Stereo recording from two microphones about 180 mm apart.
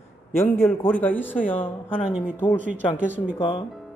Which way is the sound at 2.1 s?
5° right (ahead or behind).